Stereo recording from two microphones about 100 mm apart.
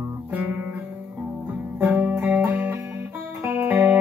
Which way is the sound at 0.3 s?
15° right (ahead or behind).